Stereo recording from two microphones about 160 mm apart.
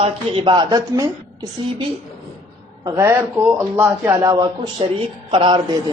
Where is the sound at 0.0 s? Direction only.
35° right (ahead or behind).